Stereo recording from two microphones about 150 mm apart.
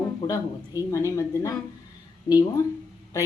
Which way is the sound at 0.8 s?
20° left (ahead or behind).